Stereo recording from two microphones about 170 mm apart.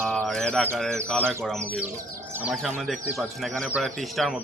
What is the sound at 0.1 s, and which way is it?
Bird, 5° left (ahead or behind).